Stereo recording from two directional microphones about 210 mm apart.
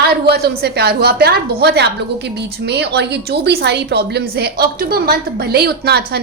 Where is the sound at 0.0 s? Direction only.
50° right (ahead or behind).